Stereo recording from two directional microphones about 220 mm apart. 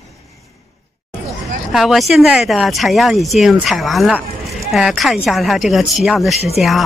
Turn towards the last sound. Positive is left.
turn(degrees=30)  # may be behind; listen again after turning